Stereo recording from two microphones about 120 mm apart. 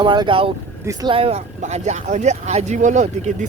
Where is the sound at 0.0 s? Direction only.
40° right (ahead or behind).